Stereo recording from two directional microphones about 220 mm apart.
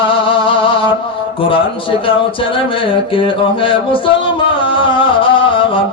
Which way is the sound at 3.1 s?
25° left (ahead or behind).